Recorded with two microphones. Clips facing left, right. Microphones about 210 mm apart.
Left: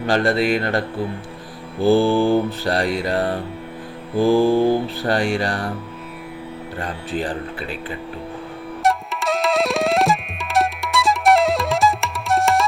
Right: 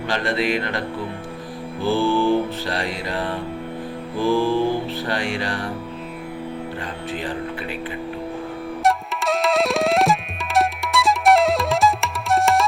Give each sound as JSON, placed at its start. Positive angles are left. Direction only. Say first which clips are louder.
{"t": 0.1, "sound": "mantra", "louder": "left 4 dB", "side_deg": 40}
{"t": 1.8, "sound": "mantra", "louder": "left 4 dB", "side_deg": 40}
{"t": 6.8, "sound": "mantra", "louder": "left 3 dB", "side_deg": 35}
{"t": 8.8, "sound": "tabla", "louder": "left 1 dB", "side_deg": 0}